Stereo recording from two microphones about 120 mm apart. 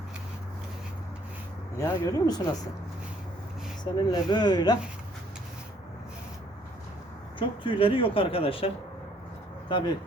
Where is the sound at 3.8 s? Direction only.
35° left (ahead or behind).